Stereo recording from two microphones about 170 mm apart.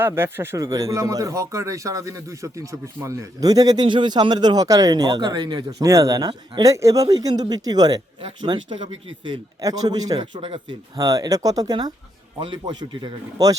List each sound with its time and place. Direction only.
0.0 s a man's voice: 15° right (ahead or behind)